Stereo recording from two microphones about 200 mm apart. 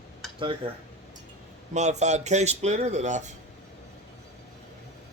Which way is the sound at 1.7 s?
35° right (ahead or behind).